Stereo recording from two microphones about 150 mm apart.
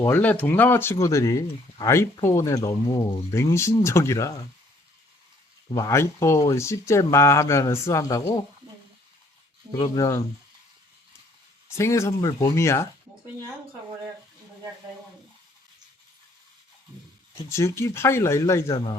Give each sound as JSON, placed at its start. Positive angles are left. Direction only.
{"t": 0.0, "sound": "speech", "side_deg": 15}
{"t": 5.7, "sound": "speech", "side_deg": 20}
{"t": 9.7, "sound": "speech", "side_deg": 25}
{"t": 11.7, "sound": "speech", "side_deg": 20}
{"t": 17.5, "sound": "speech", "side_deg": 20}